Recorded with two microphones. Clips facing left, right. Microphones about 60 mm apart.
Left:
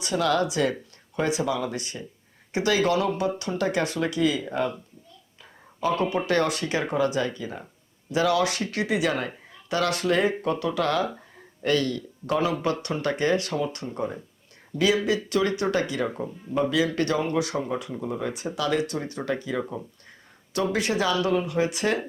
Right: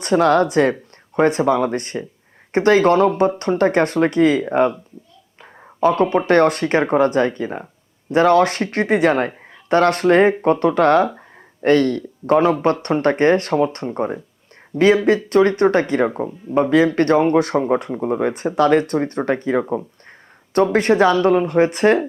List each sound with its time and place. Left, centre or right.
0.0 s speech: right
6.0 s speech: right
20.7 s speech: right